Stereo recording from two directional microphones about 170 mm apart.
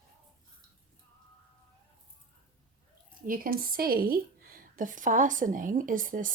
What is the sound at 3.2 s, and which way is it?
Speech, 55° right (ahead or behind).